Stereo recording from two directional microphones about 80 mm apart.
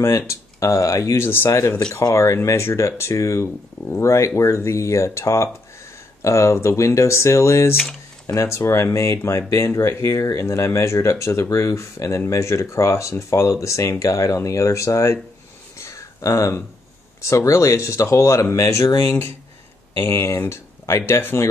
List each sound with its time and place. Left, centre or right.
0.3 s speech: left
15.8 s a sound: left
17.2 s speech: left